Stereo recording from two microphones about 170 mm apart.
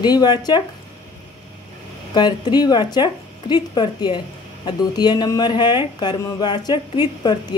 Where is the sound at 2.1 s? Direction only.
25° left (ahead or behind).